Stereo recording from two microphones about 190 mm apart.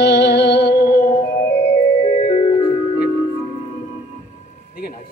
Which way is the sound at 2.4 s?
25° left (ahead or behind).